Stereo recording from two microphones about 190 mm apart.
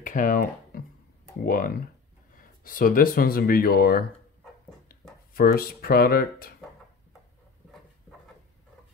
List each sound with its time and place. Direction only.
0.0 s a sound: 45° left (ahead or behind)
1.4 s speech: 45° left (ahead or behind)
5.3 s speech: 50° left (ahead or behind)